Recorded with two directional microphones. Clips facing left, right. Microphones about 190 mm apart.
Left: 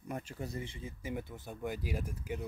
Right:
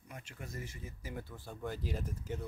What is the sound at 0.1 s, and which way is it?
Speech, 35° left (ahead or behind).